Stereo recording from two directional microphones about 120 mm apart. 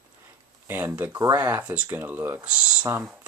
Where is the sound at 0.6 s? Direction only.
15° right (ahead or behind).